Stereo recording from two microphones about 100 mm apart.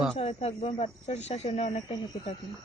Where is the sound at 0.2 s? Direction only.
90° left.